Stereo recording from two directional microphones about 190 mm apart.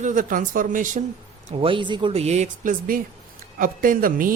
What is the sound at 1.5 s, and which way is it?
Speech, 25° right (ahead or behind).